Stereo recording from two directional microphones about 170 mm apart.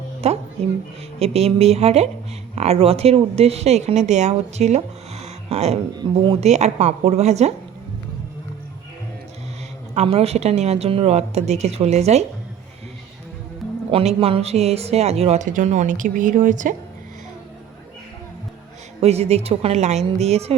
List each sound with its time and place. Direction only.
0.2 s speech: 35° right (ahead or behind)
9.9 s speech: 35° right (ahead or behind)
13.6 s music: 10° left (ahead or behind)
14.2 s speech: 35° right (ahead or behind)
18.9 s speech: 40° right (ahead or behind)